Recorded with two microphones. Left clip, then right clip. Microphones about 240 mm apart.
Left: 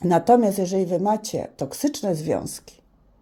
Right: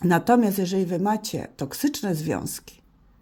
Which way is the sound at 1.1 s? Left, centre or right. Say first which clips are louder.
Left 3 dB; right.